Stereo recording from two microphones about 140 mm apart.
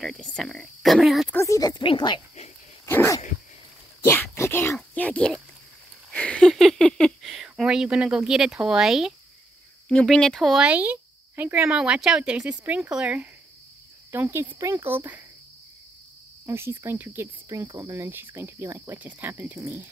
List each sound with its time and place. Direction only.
0.0 s speech: 5° left (ahead or behind)
1.3 s speech: 20° left (ahead or behind)
2.8 s dog: 20° left (ahead or behind)
4.0 s a sound: 20° left (ahead or behind)
6.1 s speech: 10° left (ahead or behind); by 15.2 s 15° right (ahead or behind)
16.4 s speech: 20° right (ahead or behind)